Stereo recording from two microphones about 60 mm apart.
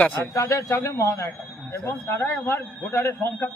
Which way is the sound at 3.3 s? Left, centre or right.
Left.